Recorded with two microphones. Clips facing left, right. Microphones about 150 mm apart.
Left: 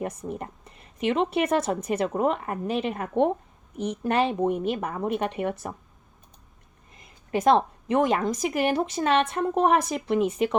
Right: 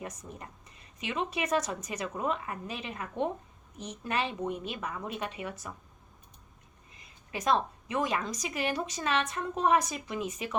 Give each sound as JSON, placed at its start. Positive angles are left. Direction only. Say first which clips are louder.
{"t": 0.0, "sound": "a woman's voice", "louder": "left 10 dB", "side_deg": 55}
{"t": 7.0, "sound": "a woman's voice", "louder": "left 11 dB", "side_deg": 55}